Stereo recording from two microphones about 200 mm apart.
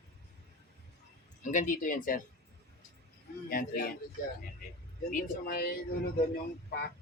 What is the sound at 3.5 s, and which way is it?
Speech, 45° left (ahead or behind).